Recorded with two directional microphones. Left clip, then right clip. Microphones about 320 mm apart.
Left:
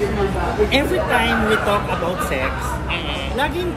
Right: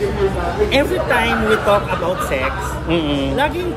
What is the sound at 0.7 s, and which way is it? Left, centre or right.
Speech, centre.